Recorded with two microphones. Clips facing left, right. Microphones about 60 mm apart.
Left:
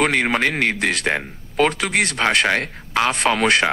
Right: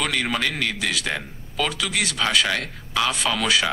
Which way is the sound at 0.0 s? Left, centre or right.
Left.